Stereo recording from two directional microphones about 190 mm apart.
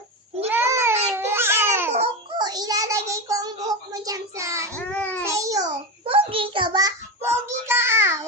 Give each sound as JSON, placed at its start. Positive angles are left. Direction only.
{"t": 0.4, "sound": "child singing", "side_deg": -15}
{"t": 1.1, "sound": "babbling", "side_deg": -15}
{"t": 2.4, "sound": "child singing", "side_deg": -20}
{"t": 4.9, "sound": "child singing", "side_deg": 10}
{"t": 5.2, "sound": "a sound", "side_deg": -15}